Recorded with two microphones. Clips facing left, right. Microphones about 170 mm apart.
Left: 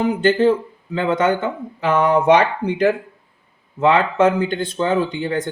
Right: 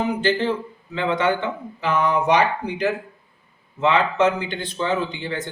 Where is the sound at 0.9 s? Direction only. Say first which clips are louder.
Left 3 dB; 45° left (ahead or behind).